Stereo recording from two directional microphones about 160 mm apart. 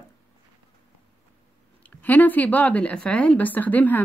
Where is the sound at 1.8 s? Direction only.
10° left (ahead or behind).